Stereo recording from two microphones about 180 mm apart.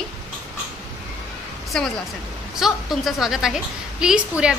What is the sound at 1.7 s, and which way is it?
A woman's voice, centre (ahead or behind).